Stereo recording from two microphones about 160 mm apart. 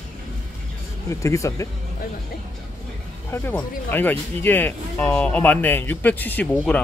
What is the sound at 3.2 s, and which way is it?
Speech, 10° left (ahead or behind).